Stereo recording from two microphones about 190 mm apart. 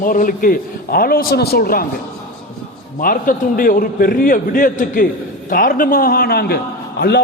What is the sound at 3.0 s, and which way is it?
A man's voice, 45° left (ahead or behind).